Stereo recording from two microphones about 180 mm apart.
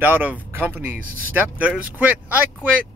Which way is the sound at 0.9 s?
50° right (ahead or behind).